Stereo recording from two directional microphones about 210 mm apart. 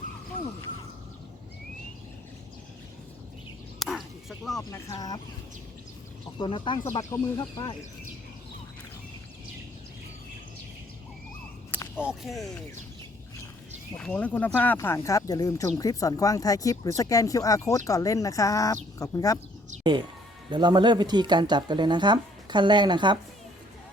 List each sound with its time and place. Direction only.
3.8 s bow-wow: centre (ahead or behind)
4.7 s speech: 15° left (ahead or behind)
6.4 s speech: 20° left (ahead or behind)
11.7 s a sound: 10° right (ahead or behind)
12.2 s speech: centre (ahead or behind)
13.9 s speech: 5° left (ahead or behind)
20.5 s speech: 20° right (ahead or behind)